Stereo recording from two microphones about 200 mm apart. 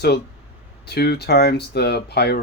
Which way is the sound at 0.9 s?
55° left (ahead or behind).